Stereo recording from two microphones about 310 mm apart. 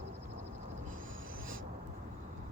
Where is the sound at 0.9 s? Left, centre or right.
Right.